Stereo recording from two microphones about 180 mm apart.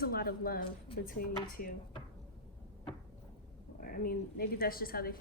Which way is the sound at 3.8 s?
55° left (ahead or behind).